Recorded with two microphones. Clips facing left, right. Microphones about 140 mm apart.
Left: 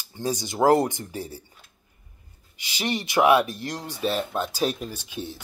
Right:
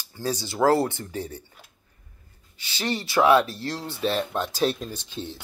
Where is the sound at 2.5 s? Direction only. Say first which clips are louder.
Even; 15° left (ahead or behind).